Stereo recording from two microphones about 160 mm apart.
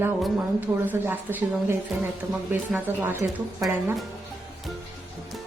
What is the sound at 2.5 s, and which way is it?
Speech, 15° right (ahead or behind).